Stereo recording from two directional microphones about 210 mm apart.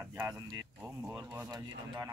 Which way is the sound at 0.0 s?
10° right (ahead or behind).